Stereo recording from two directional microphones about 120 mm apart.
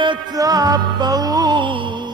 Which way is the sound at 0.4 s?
30° right (ahead or behind).